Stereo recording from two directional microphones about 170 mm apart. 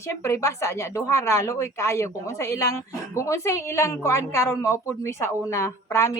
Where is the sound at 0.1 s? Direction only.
15° left (ahead or behind).